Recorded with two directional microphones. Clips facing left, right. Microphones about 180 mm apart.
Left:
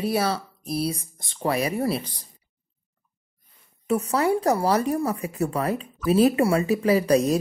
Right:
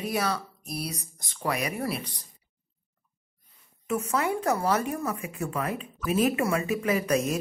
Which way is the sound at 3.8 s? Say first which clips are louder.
Left 5 dB; 35° left (ahead or behind).